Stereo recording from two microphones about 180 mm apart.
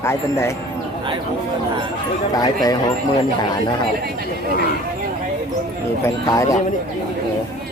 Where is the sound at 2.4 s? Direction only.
20° left (ahead or behind).